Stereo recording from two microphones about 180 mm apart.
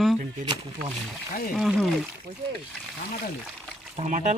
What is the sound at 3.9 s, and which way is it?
Speech, 40° right (ahead or behind).